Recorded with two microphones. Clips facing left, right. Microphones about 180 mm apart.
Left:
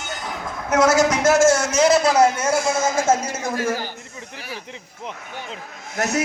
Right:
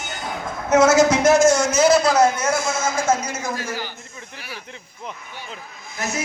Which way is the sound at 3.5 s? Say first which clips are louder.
Left 5 dB; 50° left (ahead or behind).